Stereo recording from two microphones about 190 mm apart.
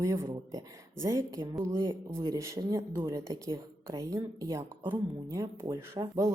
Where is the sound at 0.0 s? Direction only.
15° right (ahead or behind).